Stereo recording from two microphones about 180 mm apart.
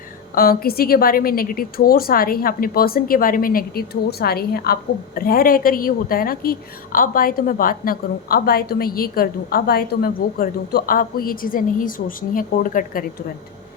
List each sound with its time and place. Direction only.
0.3 s a woman's voice: 55° left (ahead or behind)